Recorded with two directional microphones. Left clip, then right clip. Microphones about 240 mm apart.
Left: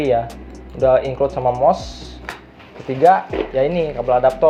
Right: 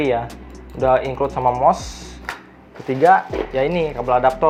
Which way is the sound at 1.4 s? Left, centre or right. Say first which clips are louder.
Right 1 dB; right.